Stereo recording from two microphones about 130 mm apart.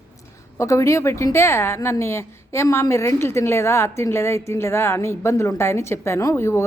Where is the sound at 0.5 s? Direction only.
20° left (ahead or behind).